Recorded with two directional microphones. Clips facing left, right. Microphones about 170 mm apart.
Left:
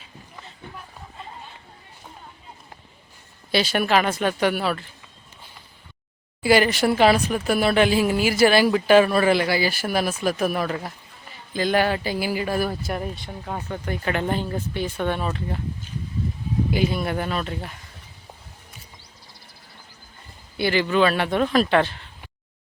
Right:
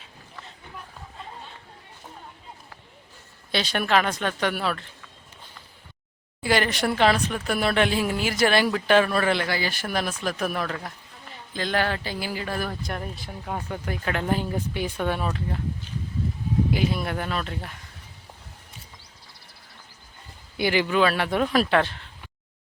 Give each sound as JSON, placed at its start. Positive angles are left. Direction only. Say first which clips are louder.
{"t": 3.5, "sound": "speech", "louder": "left 3 dB", "side_deg": 5}
{"t": 6.4, "sound": "speech", "louder": "left 5 dB", "side_deg": 10}
{"t": 16.7, "sound": "speech", "louder": "left 2 dB", "side_deg": 0}
{"t": 20.6, "sound": "speech", "louder": "left 1 dB", "side_deg": -15}
{"t": 20.8, "sound": "speech", "louder": "left 2 dB", "side_deg": -5}